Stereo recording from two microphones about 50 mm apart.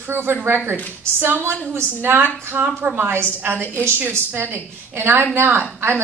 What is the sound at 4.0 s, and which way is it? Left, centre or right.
A woman's voice, right.